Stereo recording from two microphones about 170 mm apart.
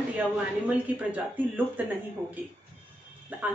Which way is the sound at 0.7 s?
10° right (ahead or behind).